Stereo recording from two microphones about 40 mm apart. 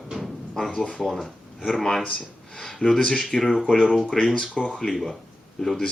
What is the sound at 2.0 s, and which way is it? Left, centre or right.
Speech, left.